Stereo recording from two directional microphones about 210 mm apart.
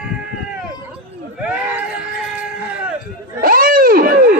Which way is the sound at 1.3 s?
5° right (ahead or behind).